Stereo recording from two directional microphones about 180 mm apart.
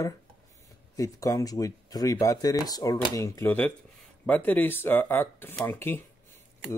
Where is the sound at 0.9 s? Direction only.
20° left (ahead or behind).